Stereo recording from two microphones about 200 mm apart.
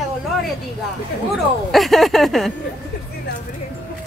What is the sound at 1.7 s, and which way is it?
Speech, centre (ahead or behind).